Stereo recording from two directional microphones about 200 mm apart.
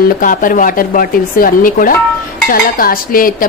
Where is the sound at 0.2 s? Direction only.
45° left (ahead or behind).